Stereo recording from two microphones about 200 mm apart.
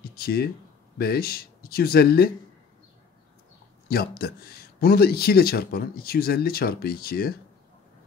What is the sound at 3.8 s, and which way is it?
A man's voice, 50° left (ahead or behind).